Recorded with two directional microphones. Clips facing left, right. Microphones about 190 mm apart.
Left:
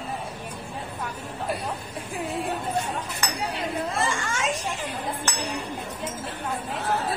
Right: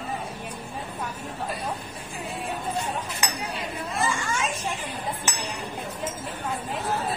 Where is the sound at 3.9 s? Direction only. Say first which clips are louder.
Even; 75° left (ahead or behind).